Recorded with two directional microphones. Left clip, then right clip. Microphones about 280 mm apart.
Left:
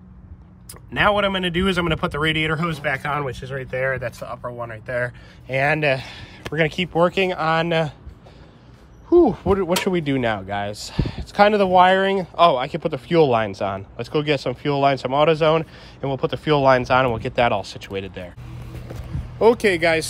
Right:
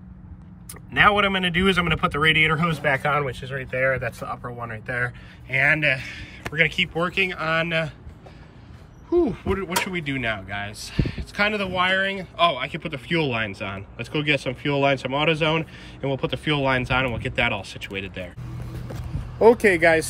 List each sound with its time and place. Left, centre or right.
0.9 s speech: centre
9.1 s speech: centre